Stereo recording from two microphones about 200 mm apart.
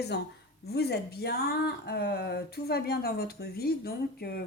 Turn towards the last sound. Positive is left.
turn(degrees=50)  # may be behind; listen again after turning